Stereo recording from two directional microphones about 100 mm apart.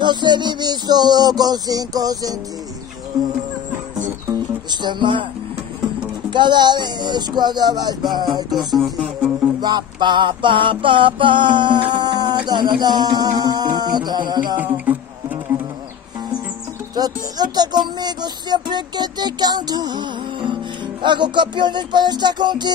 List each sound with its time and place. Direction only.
0.0 s music: 50° right (ahead or behind)
4.3 s music: 50° right (ahead or behind)
6.3 s music: 50° right (ahead or behind)
14.9 s insect: 15° right (ahead or behind)
16.9 s music: 45° right (ahead or behind)